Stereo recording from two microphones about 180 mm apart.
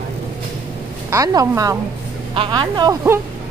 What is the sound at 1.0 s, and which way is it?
Speech, 20° right (ahead or behind).